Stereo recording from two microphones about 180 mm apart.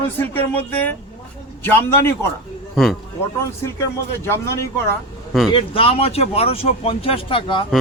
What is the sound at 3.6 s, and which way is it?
A man's voice, 15° left (ahead or behind).